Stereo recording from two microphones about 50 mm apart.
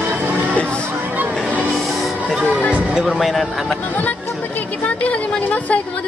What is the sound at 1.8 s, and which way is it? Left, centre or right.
Music, centre.